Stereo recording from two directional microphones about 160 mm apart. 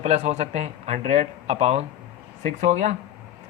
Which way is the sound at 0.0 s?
45° right (ahead or behind).